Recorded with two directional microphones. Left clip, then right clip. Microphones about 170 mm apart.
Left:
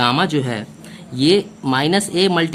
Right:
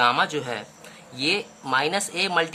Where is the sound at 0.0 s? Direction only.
20° left (ahead or behind).